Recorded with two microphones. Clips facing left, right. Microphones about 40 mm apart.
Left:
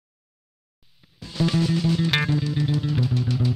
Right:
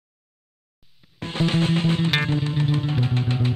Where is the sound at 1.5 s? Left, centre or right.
Right.